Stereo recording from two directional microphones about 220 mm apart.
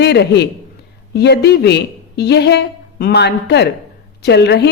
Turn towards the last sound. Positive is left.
turn(degrees=50)  # may be behind; listen again after turning